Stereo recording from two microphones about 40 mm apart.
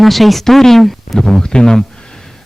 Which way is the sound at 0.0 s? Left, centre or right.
Centre.